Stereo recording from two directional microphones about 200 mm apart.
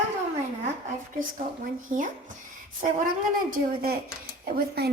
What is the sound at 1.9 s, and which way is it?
Speech, 40° right (ahead or behind).